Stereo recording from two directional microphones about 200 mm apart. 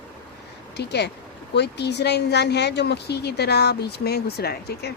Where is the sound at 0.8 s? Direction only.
55° left (ahead or behind).